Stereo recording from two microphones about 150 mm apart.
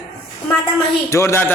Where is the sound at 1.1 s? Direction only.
20° left (ahead or behind).